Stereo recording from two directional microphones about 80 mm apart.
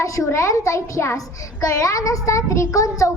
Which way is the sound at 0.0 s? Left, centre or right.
Left.